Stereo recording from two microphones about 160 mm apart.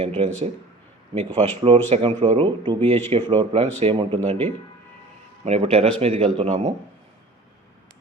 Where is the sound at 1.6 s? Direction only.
40° right (ahead or behind).